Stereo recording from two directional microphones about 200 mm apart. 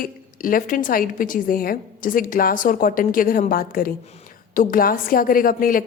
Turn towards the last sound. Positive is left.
turn(degrees=45)  # may be behind; listen again after turning